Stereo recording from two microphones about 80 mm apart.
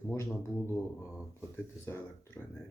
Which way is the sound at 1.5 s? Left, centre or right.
Left.